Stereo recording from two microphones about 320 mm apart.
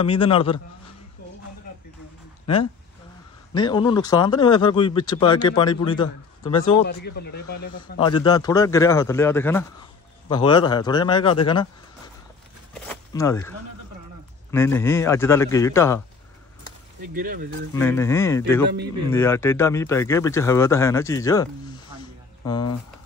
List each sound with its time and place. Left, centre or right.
0.0 s speech: centre
3.5 s speech: centre
6.8 s speech: left
7.7 s speech: centre
12.8 s zipper: centre
14.5 s speech: centre
17.1 s speech: right
17.7 s speech: centre